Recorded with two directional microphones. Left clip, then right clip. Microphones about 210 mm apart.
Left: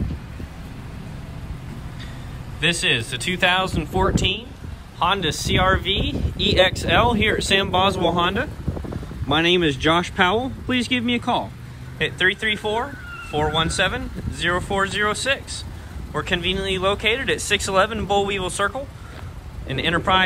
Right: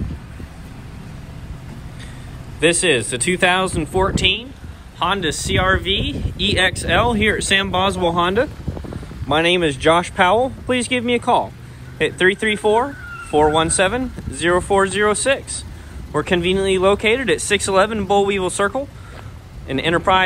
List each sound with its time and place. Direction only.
2.6 s speech: 10° left (ahead or behind)